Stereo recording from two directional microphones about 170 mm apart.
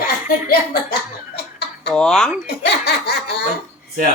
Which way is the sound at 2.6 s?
70° left (ahead or behind).